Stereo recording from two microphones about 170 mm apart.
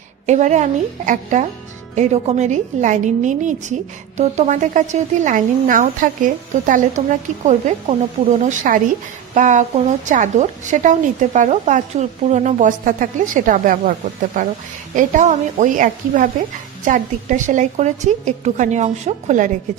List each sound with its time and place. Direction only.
0.3 s speech: 45° right (ahead or behind)
14.9 s speech: 45° right (ahead or behind)